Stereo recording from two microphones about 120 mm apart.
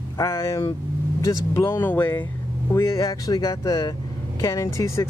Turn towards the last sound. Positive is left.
turn(degrees=25)  # may be behind; listen again after turning